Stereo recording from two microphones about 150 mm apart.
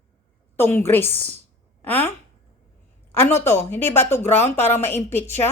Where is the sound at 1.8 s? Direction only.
10° left (ahead or behind).